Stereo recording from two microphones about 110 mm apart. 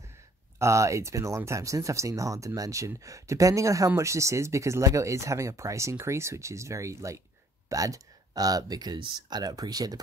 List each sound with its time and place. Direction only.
0.6 s speech: 25° right (ahead or behind)